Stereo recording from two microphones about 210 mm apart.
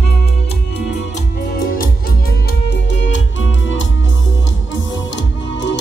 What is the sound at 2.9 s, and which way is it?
Music, 60° left (ahead or behind).